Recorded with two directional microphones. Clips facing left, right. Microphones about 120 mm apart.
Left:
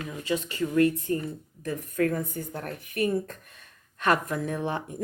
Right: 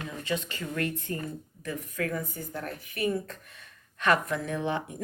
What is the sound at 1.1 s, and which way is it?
Speech, 30° left (ahead or behind).